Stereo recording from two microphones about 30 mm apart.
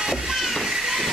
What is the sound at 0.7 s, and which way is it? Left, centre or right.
Train, centre.